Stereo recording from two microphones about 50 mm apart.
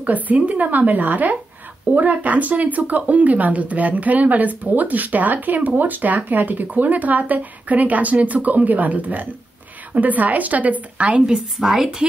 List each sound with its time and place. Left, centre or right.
0.0 s speech: right
11.7 s a woman's voice: centre